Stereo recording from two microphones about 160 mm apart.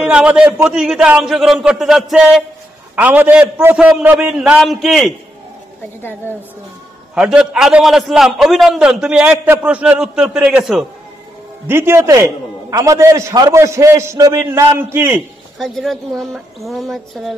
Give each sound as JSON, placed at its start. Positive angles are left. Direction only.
{"t": 0.0, "sound": "a man's voice", "side_deg": -5}
{"t": 7.2, "sound": "a man's voice", "side_deg": -5}
{"t": 11.6, "sound": "a man's voice", "side_deg": -15}
{"t": 15.6, "sound": "a man's voice", "side_deg": 0}